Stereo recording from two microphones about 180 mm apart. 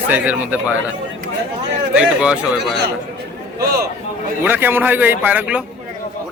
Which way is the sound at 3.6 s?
60° right (ahead or behind).